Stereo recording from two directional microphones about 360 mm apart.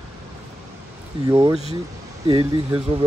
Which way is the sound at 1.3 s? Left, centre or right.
Centre.